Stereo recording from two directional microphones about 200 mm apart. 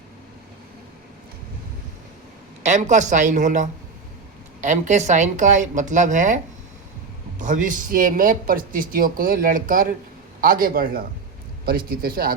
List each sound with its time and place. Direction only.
2.6 s a woman's voice: 35° right (ahead or behind)